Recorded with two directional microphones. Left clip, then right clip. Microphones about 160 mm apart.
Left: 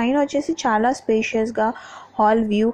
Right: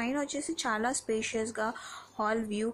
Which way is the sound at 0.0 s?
25° left (ahead or behind).